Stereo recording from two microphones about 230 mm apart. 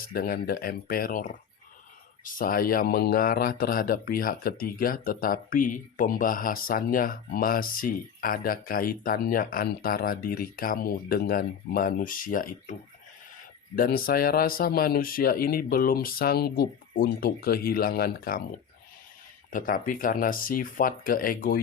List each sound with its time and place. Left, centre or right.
0.1 s speech: left
13.7 s speech: left
19.5 s speech: left